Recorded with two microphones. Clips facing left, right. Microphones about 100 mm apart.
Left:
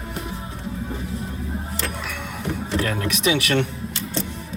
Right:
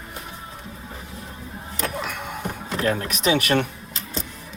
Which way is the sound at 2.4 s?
30° right (ahead or behind).